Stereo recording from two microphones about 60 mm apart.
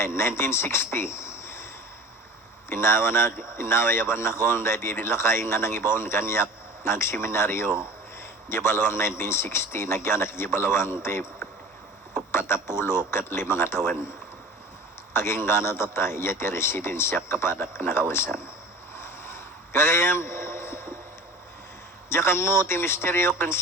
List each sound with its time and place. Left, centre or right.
0.0 s speech: left
0.9 s cricket: left
2.6 s speech: left
12.3 s speech: left
15.1 s speech: left
18.9 s a sound: left
22.1 s speech: left